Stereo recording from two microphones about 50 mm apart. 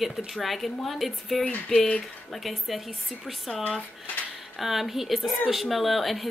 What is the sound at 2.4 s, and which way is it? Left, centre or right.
Speech, centre.